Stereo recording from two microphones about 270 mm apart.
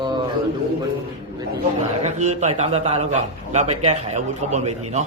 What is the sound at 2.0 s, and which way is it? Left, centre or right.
A man's voice, right.